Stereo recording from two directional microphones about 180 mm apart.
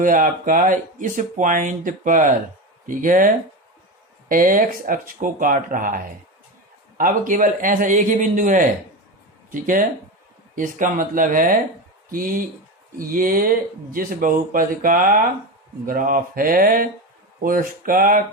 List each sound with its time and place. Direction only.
0.0 s speech: 50° right (ahead or behind)